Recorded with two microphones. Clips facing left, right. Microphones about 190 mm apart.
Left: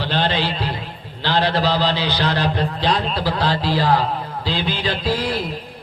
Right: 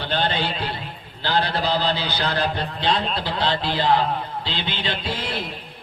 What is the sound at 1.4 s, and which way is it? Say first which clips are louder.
Speech: left 4 dB; 30° left (ahead or behind).